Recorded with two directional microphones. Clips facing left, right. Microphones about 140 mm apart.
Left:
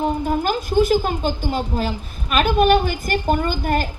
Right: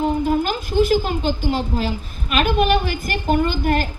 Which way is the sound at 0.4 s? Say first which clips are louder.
Left 1 dB; 45° left (ahead or behind).